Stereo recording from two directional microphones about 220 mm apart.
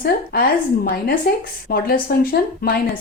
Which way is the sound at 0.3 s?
45° left (ahead or behind).